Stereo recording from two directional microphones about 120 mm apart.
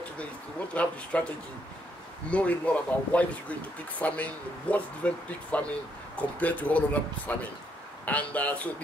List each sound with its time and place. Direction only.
0.8 s speech: 10° left (ahead or behind)
2.3 s speech: 10° left (ahead or behind)